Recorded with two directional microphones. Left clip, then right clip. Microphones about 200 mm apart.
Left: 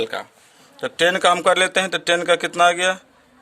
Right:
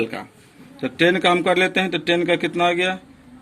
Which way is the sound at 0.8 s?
45° left (ahead or behind).